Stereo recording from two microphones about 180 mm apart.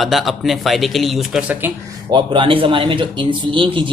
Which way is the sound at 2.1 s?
25° right (ahead or behind).